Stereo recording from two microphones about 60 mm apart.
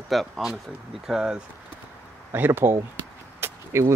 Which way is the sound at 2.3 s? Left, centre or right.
Right.